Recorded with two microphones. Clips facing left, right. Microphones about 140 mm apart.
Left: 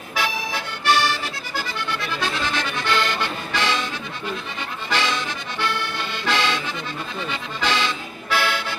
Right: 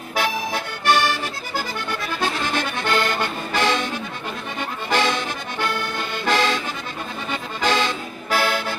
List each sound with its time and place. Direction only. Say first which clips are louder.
0.2 s accordion: right 3 dB; 50° right (ahead or behind)
4.9 s accordion: right 3 dB; 50° right (ahead or behind)